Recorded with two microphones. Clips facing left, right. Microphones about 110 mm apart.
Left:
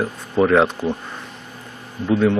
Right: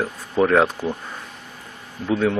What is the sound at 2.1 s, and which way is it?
Speech, centre (ahead or behind).